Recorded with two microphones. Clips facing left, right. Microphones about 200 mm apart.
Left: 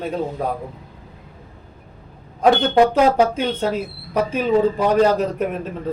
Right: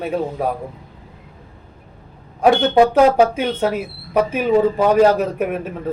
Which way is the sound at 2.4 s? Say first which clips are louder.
Right 1 dB; 10° right (ahead or behind).